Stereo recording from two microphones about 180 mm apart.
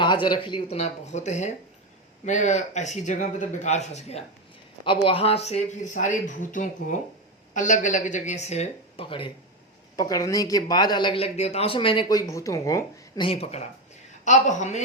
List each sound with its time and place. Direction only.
0.0 s speech: 25° left (ahead or behind)
4.9 s speech: 30° left (ahead or behind)
13.2 s speech: 35° left (ahead or behind)